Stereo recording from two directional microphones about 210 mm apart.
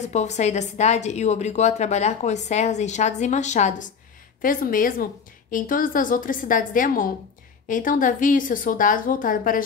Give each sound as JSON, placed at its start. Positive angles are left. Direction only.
{"t": 0.0, "sound": "a woman's voice", "side_deg": 35}